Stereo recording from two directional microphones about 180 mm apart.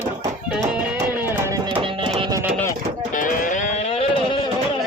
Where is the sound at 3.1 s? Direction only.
50° left (ahead or behind); by 4.4 s 30° left (ahead or behind).